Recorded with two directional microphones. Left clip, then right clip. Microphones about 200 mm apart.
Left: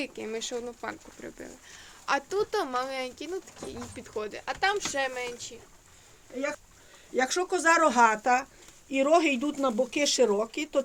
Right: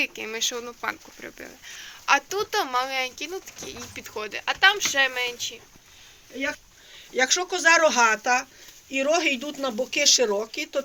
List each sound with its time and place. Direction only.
0.0 s speech: 15° left (ahead or behind)
7.2 s speech: 45° left (ahead or behind)